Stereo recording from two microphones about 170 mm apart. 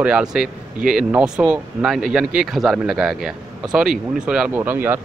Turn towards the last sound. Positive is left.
turn(degrees=-10)  # may be behind; listen again after turning